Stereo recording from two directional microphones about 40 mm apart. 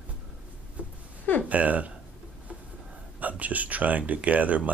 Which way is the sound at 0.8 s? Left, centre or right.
Right.